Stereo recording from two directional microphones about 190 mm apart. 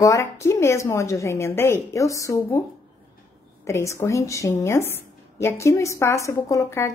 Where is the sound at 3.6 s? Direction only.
15° left (ahead or behind).